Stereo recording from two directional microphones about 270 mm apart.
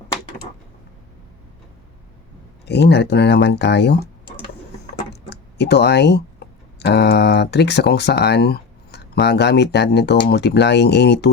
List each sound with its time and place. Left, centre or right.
2.6 s speech: left
5.3 s speech: left